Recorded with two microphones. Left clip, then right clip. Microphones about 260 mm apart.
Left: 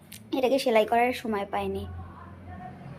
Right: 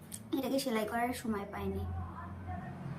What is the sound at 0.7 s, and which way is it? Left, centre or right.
Speech, left.